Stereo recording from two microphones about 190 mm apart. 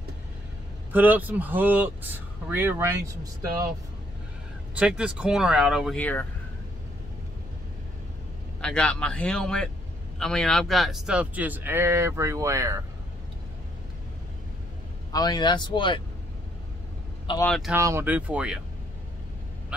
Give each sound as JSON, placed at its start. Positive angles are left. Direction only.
{"t": 0.9, "sound": "speech", "side_deg": -10}
{"t": 4.7, "sound": "speech", "side_deg": -5}
{"t": 5.9, "sound": "speech", "side_deg": 10}
{"t": 8.5, "sound": "speech", "side_deg": 5}
{"t": 15.1, "sound": "speech", "side_deg": 20}
{"t": 17.4, "sound": "speech", "side_deg": 0}
{"t": 17.7, "sound": "speech", "side_deg": -15}